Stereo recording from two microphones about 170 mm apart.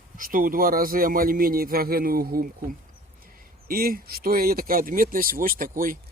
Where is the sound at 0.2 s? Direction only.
55° right (ahead or behind).